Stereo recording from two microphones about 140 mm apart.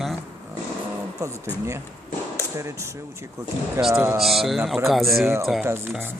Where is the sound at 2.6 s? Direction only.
20° right (ahead or behind).